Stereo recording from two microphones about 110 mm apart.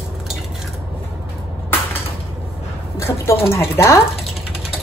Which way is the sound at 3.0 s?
25° left (ahead or behind).